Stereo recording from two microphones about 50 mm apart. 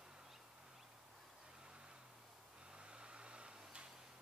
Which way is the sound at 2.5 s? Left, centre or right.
Right.